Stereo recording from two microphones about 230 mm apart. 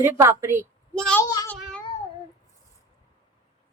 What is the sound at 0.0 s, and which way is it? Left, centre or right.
Speech, centre.